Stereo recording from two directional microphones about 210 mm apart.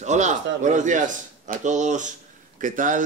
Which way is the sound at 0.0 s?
35° right (ahead or behind).